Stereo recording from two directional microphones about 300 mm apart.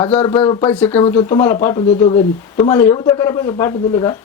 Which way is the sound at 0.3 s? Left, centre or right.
Centre.